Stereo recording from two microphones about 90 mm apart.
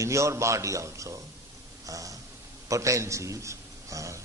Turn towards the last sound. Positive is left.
turn(degrees=-35)  # may be behind; listen again after turning